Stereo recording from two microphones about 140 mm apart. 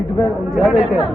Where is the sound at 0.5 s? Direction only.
Centre (ahead or behind).